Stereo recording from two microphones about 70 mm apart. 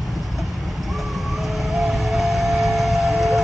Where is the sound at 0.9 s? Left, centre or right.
Centre.